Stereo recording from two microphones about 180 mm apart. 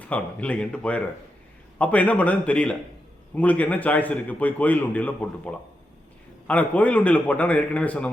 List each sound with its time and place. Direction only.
0.0 s a man's voice: 10° left (ahead or behind)